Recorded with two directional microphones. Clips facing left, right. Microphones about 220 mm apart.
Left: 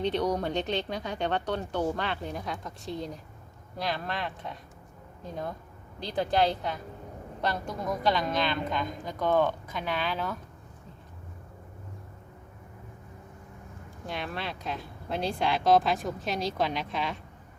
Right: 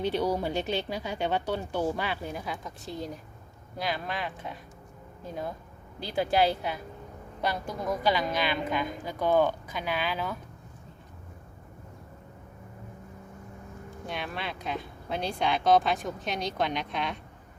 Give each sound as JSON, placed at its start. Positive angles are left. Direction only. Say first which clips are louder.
{"t": 0.0, "sound": "speech", "louder": "even", "side_deg": -5}
{"t": 14.1, "sound": "speech", "louder": "left 1 dB", "side_deg": 0}